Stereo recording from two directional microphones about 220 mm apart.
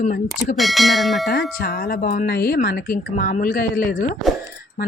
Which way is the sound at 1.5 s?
45° left (ahead or behind).